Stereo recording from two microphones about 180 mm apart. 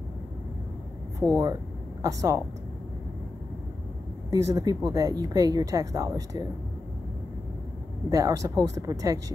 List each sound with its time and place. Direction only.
1.4 s speech: 20° right (ahead or behind)
4.3 s speech: 20° right (ahead or behind)
8.1 s speech: 20° right (ahead or behind)